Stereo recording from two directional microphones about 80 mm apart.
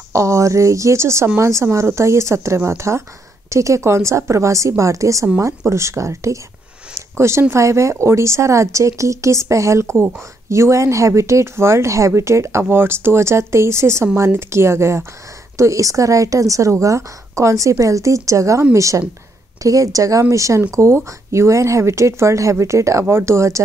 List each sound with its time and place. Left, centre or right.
0.1 s speech: right